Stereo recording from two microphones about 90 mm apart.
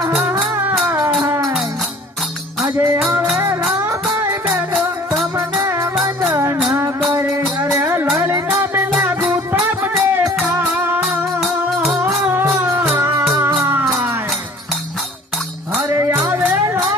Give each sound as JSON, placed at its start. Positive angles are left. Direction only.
{"t": 2.7, "sound": "music", "side_deg": -30}
{"t": 4.7, "sound": "music", "side_deg": 0}
{"t": 5.4, "sound": "music", "side_deg": -30}
{"t": 7.8, "sound": "music", "side_deg": -25}
{"t": 11.3, "sound": "music", "side_deg": 0}
{"t": 12.3, "sound": "music", "side_deg": -25}